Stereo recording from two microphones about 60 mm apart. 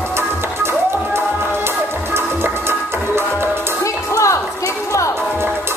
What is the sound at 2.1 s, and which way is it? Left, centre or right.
Music, right.